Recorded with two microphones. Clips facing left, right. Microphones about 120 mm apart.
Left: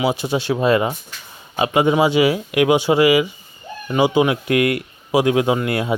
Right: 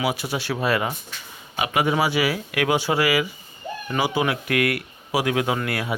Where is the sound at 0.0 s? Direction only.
25° left (ahead or behind).